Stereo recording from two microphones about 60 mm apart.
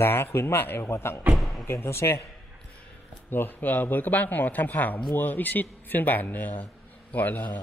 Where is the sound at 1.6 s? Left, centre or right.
Left.